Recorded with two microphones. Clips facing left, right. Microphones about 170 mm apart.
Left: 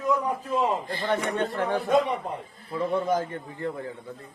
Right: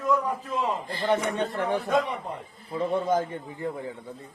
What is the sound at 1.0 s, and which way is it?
A man's voice, 15° right (ahead or behind).